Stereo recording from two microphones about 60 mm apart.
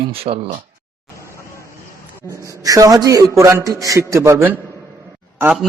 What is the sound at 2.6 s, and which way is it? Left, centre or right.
A man's voice, right.